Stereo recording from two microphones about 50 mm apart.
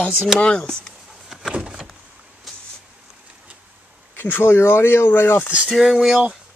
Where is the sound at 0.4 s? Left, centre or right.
Centre.